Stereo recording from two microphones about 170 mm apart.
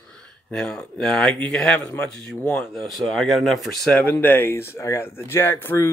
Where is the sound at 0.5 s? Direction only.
5° left (ahead or behind).